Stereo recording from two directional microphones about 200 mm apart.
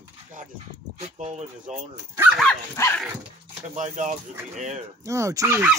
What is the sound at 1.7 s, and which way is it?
Speech, 5° right (ahead or behind).